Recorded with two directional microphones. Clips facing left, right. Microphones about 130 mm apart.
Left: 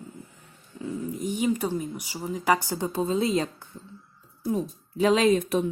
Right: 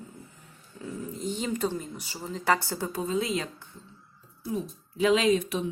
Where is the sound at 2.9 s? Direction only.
30° left (ahead or behind).